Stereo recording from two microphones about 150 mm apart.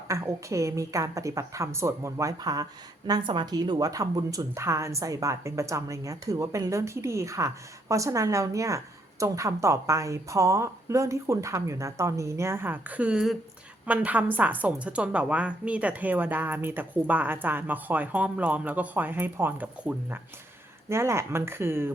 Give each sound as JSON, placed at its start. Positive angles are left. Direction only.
{"t": 0.1, "sound": "a woman's voice", "side_deg": -20}